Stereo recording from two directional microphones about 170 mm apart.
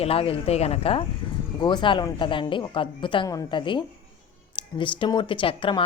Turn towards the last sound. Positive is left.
turn(degrees=30)  # may be behind; listen again after turning